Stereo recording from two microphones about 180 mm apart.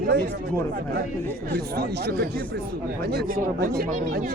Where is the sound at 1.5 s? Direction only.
65° right (ahead or behind).